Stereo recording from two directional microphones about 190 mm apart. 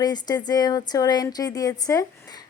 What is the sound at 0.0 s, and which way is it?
A woman's voice, 20° left (ahead or behind).